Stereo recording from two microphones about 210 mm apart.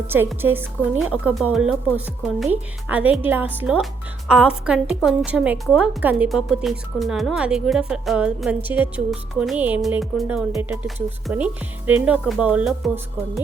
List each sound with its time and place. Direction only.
0.1 s a woman's voice: 10° right (ahead or behind)